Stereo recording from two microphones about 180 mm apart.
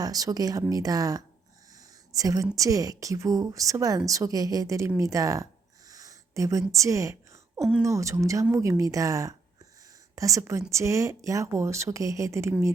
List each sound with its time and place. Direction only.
0.0 s a woman's voice: 20° right (ahead or behind)
5.9 s a sound: 20° right (ahead or behind)
7.8 s speech: 15° right (ahead or behind)